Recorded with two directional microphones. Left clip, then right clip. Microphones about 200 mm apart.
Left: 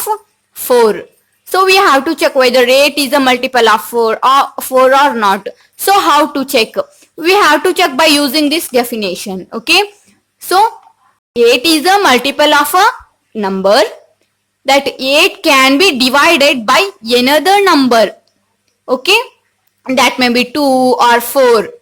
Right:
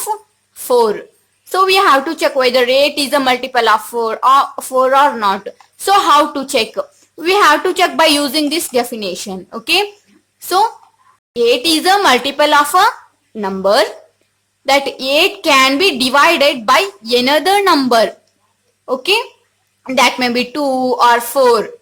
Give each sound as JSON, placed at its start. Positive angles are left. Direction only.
{"t": 0.7, "sound": "a woman's voice", "side_deg": 15}
{"t": 11.3, "sound": "a woman's voice", "side_deg": 15}
{"t": 19.8, "sound": "a woman's voice", "side_deg": 15}